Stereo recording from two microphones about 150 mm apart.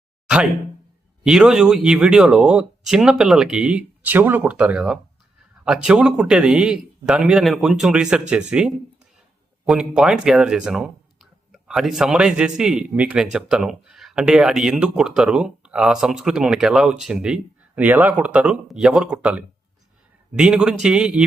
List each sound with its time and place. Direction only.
1.2 s speech: 5° right (ahead or behind)